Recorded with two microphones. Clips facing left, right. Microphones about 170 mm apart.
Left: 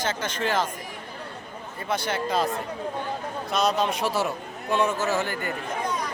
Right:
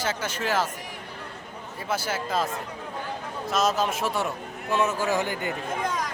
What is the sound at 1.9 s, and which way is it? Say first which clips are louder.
Speech: left 2 dB; 5° right (ahead or behind).